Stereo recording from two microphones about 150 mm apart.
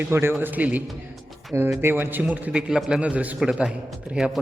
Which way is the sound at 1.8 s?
15° right (ahead or behind).